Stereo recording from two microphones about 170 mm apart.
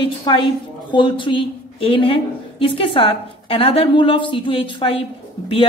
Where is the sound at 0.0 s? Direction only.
30° left (ahead or behind).